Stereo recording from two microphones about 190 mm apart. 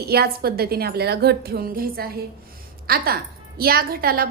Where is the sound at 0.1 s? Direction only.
55° right (ahead or behind).